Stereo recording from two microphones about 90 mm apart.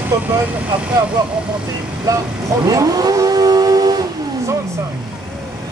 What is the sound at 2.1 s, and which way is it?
Speech, 40° right (ahead or behind).